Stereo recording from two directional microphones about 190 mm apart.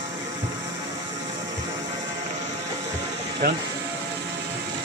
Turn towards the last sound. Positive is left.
turn(degrees=-50)  # may be behind; listen again after turning